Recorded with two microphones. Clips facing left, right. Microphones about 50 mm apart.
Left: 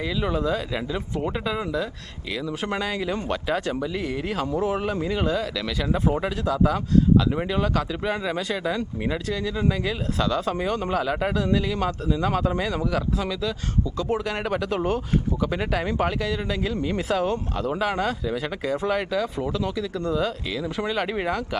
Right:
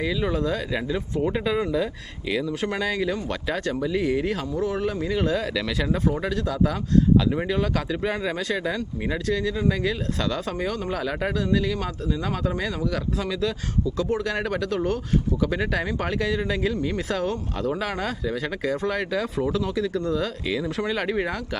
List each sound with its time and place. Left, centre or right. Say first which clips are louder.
0.0 s speech: even; centre
4.5 s speech: left 2 dB; left
4.9 s speech: even; centre
6.2 s speech: left 1 dB; centre
17.1 s speech: left 2 dB; centre
20.5 s speech: right 1 dB; centre